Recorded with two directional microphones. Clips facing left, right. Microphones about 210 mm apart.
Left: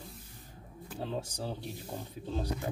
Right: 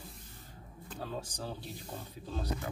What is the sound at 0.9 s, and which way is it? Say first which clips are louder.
Speech: left 4 dB; 20° left (ahead or behind).